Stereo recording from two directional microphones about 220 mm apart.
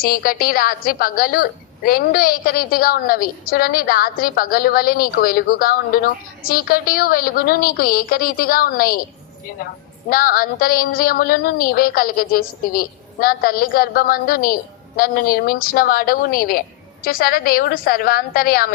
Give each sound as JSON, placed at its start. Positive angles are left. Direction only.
{"t": 0.0, "sound": "a woman's voice", "side_deg": 40}
{"t": 10.1, "sound": "a woman's voice", "side_deg": 40}